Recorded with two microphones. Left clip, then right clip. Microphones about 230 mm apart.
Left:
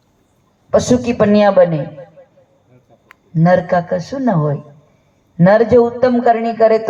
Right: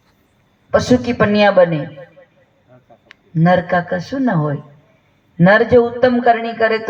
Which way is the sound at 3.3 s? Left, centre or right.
Left.